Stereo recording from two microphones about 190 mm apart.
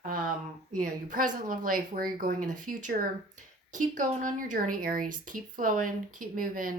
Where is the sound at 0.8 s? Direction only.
45° right (ahead or behind).